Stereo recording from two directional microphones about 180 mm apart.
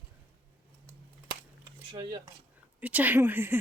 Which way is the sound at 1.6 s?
25° right (ahead or behind).